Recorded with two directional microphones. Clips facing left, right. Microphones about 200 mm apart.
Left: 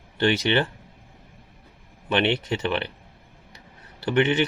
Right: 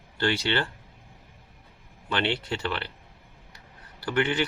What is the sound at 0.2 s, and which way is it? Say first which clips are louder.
Speech: left 5 dB; 20° left (ahead or behind).